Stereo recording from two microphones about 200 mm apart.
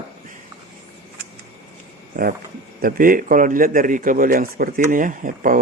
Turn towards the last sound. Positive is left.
turn(degrees=-40)  # may be behind; listen again after turning